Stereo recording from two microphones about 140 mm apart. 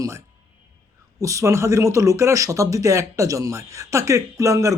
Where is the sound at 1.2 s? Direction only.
20° right (ahead or behind).